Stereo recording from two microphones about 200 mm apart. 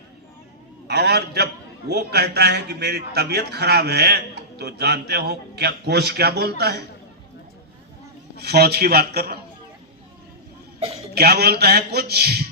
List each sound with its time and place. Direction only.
0.9 s a man's voice: 55° right (ahead or behind)
8.4 s a man's voice: 55° right (ahead or behind)
11.1 s a man's voice: 55° right (ahead or behind)